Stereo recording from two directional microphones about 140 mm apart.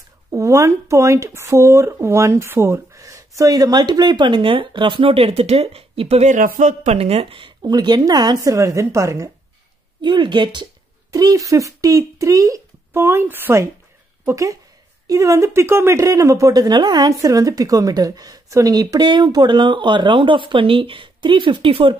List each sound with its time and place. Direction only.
0.3 s speech: 20° right (ahead or behind); by 6.3 s 45° right (ahead or behind)
6.3 s speech: 75° right (ahead or behind)
6.7 s speech: 55° right (ahead or behind); by 9.3 s 20° right (ahead or behind)
10.0 s speech: 35° right (ahead or behind)